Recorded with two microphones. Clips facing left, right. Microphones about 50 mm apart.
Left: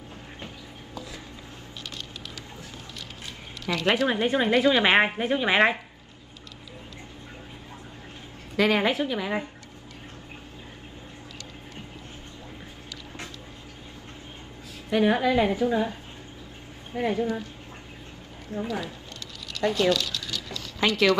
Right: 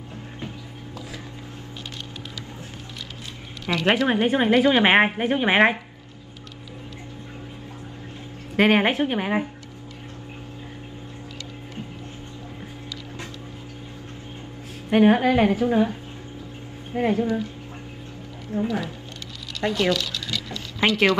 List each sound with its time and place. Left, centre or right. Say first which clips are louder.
3.6 s a woman's voice: right 3 dB; right
8.5 s a woman's voice: right 4 dB; right
14.9 s a woman's voice: right 5 dB; right
16.9 s a woman's voice: right 4 dB; right
18.5 s a woman's voice: right 5 dB; right